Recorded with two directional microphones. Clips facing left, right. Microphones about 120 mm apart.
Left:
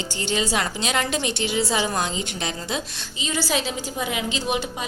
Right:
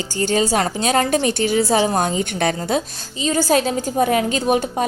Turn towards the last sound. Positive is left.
turn(degrees=-45)  # may be behind; listen again after turning